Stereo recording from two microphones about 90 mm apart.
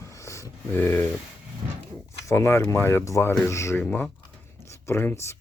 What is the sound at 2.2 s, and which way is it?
Speech, 30° left (ahead or behind).